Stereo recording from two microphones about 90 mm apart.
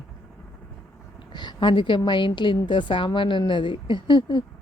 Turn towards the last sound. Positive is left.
turn(degrees=60)  # may be behind; listen again after turning